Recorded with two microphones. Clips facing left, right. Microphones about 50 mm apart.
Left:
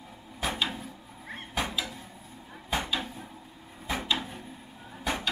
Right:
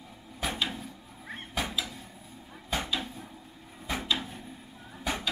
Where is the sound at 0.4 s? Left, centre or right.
Centre.